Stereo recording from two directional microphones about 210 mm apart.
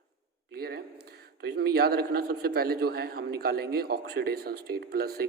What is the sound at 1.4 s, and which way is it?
A man's voice, 50° right (ahead or behind).